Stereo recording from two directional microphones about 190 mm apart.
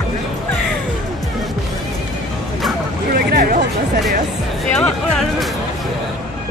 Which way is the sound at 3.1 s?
50° right (ahead or behind).